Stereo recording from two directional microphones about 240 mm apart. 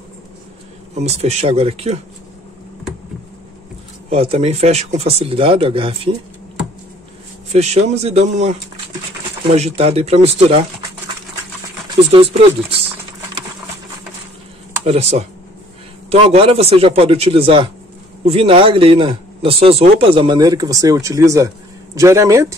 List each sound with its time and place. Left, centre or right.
0.9 s speech: right
4.1 s speech: right
7.5 s speech: right
9.6 s speech: right
12.1 s speech: right
14.9 s speech: right